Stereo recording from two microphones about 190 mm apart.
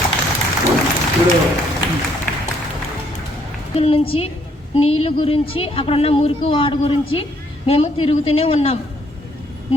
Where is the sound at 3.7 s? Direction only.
30° left (ahead or behind).